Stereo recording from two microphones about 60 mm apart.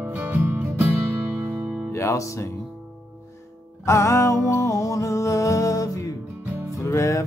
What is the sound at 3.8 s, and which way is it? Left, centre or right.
Music, left.